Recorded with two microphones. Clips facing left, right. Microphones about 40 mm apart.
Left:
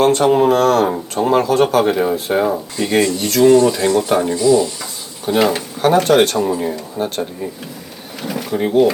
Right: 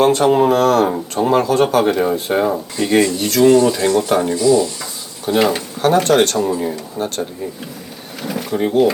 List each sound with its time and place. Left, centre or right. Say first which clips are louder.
0.0 s speech: even; centre